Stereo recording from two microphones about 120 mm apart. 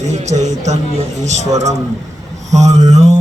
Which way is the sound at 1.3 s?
70° right (ahead or behind).